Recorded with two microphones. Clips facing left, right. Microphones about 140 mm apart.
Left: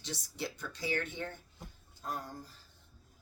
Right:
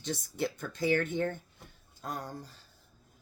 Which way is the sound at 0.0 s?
50° right (ahead or behind).